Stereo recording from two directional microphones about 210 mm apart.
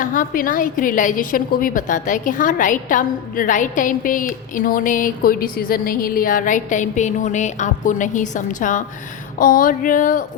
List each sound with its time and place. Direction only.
0.0 s a woman's voice: 40° left (ahead or behind)